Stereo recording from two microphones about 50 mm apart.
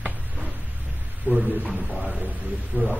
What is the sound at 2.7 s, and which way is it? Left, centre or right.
Speech, right.